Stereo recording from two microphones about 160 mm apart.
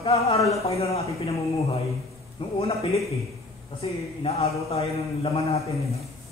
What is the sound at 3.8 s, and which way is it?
Speech, 40° left (ahead or behind).